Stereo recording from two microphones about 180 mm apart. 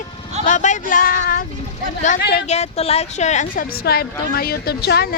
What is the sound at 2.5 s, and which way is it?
A woman's voice, 35° left (ahead or behind).